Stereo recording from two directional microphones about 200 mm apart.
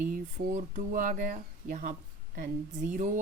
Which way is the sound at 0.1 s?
40° right (ahead or behind).